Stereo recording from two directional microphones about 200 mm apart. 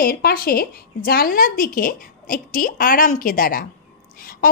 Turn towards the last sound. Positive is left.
turn(degrees=45)  # may be behind; listen again after turning